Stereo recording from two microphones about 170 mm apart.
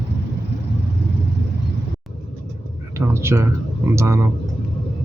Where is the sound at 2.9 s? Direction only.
15° right (ahead or behind).